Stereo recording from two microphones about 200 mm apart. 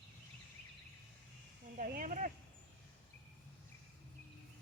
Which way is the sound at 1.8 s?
45° right (ahead or behind).